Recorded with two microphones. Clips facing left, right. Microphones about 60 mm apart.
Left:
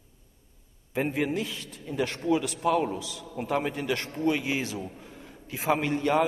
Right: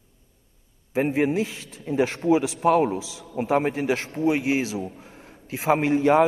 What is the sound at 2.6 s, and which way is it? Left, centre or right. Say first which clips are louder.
A man's voice: right 6 dB; right.